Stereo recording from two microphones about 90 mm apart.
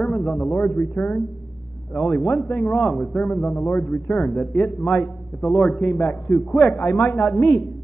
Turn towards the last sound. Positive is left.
turn(degrees=10)  # may be behind; listen again after turning